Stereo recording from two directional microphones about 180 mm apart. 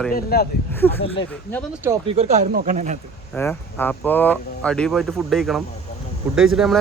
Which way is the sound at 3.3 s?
10° left (ahead or behind).